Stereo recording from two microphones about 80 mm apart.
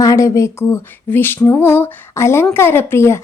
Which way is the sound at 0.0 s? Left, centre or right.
Left.